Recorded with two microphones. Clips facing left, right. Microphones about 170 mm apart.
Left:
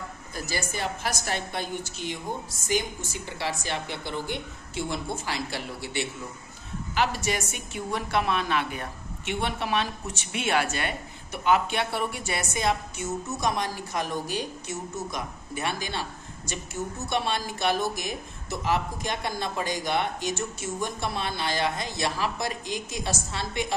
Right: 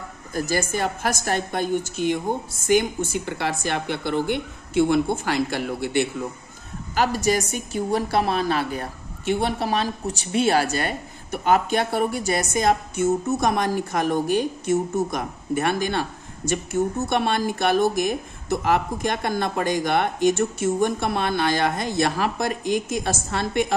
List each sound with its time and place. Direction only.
0.3 s a woman's voice: 50° right (ahead or behind)
7.0 s a woman's voice: 40° right (ahead or behind)